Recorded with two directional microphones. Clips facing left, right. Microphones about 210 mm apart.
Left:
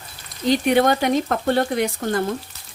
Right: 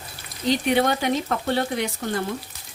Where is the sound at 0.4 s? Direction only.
50° left (ahead or behind).